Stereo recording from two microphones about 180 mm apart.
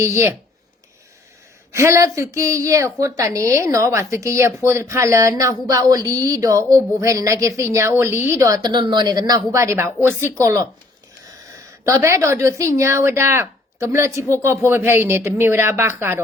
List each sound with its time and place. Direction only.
0.0 s a woman's voice: 15° right (ahead or behind)
1.7 s a woman's voice: 15° right (ahead or behind)
11.9 s a woman's voice: 15° right (ahead or behind)